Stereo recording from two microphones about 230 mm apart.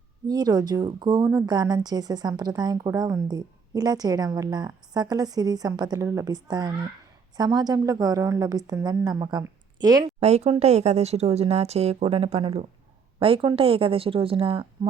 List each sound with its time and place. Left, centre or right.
0.3 s speech: centre
10.2 s speech: right